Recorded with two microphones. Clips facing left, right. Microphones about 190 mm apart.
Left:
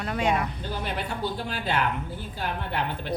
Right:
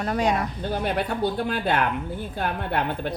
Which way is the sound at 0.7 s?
55° right (ahead or behind).